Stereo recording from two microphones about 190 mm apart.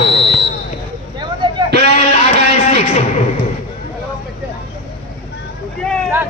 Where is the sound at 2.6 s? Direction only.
35° left (ahead or behind).